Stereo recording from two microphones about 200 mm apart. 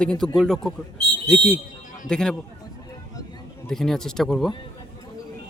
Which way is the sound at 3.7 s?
Centre (ahead or behind).